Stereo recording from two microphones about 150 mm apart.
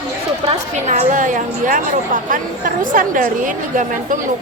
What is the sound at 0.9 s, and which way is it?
A woman's voice, 55° right (ahead or behind).